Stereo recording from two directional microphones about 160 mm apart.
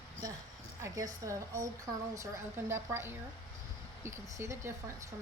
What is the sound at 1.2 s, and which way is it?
A woman's voice, 20° right (ahead or behind).